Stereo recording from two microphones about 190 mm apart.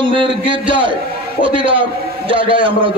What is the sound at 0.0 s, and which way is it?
A man's voice, 25° right (ahead or behind).